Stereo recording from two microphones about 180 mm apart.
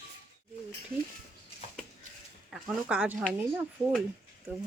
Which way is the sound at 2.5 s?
5° right (ahead or behind).